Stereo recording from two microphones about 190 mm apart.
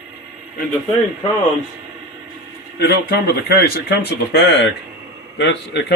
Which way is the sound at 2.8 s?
60° left (ahead or behind).